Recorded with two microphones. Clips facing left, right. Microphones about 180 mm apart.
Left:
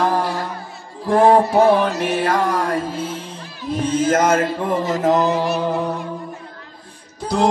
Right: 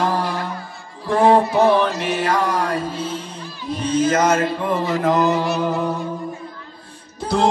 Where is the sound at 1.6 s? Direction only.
50° left (ahead or behind).